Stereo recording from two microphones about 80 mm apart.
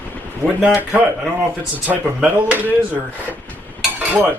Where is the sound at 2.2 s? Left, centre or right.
Centre.